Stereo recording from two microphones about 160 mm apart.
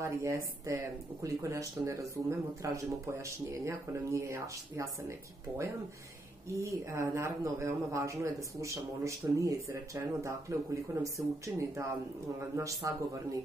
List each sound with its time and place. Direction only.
0.0 s speech: 20° right (ahead or behind)
6.6 s speech: 15° right (ahead or behind)